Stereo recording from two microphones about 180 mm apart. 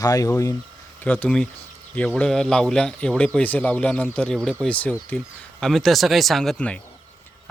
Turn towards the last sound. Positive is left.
turn(degrees=5)  # may be behind; listen again after turning